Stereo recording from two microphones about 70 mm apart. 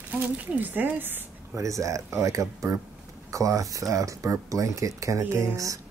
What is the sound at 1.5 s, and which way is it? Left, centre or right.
Speech, right.